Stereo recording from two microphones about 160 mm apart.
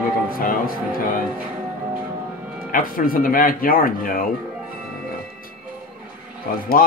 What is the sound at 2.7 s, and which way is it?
Speech, 60° left (ahead or behind).